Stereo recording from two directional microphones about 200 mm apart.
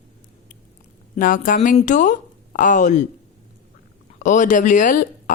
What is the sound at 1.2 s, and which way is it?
Speech, 40° left (ahead or behind).